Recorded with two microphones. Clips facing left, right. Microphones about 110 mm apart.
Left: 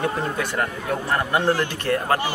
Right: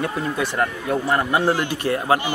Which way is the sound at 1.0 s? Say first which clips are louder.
Right 1 dB; 10° right (ahead or behind).